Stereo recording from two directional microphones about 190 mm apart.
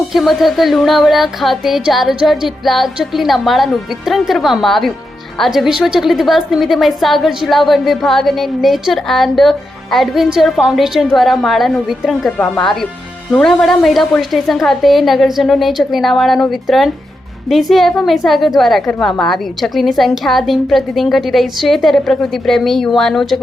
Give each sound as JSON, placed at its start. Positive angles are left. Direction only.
{"t": 0.1, "sound": "a woman's voice", "side_deg": 0}